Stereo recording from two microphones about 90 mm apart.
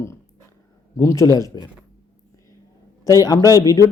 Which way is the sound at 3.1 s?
40° left (ahead or behind).